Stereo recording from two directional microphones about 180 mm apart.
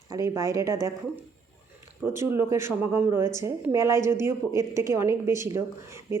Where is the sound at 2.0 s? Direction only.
10° right (ahead or behind).